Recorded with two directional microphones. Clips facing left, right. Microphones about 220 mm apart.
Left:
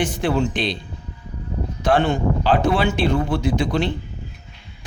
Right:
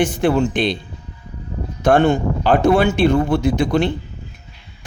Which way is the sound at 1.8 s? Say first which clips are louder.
Right 4 dB; 45° right (ahead or behind).